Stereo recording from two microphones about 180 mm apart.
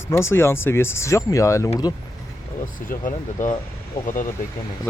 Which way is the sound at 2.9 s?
45° left (ahead or behind).